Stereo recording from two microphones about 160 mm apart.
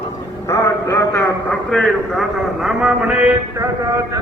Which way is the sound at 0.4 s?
15° left (ahead or behind).